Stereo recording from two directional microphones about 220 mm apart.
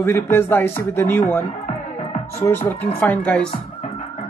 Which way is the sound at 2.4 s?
10° left (ahead or behind).